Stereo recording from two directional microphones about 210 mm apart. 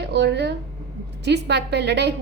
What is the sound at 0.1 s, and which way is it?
A woman's voice, 55° right (ahead or behind).